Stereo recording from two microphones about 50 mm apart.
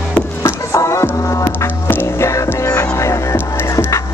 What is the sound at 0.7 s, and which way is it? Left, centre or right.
Music, left.